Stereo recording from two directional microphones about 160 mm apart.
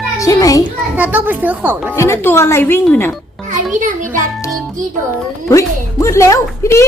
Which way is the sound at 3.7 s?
55° right (ahead or behind).